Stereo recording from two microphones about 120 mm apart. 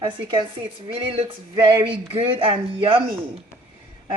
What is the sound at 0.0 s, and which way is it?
Speech, 40° right (ahead or behind).